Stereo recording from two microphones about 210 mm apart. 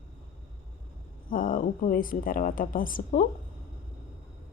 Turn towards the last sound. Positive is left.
turn(degrees=40)  # may be behind; listen again after turning